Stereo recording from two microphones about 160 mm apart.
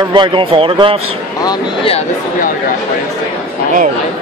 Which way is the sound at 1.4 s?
35° left (ahead or behind).